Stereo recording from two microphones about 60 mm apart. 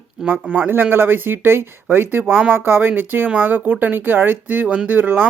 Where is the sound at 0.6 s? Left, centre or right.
Right.